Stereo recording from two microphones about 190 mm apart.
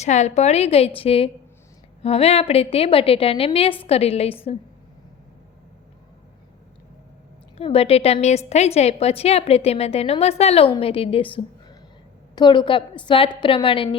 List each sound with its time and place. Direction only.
0.0 s a woman's voice: 35° left (ahead or behind)
7.5 s a woman's voice: 30° left (ahead or behind)